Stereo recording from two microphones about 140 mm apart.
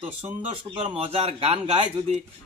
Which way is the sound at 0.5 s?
45° right (ahead or behind).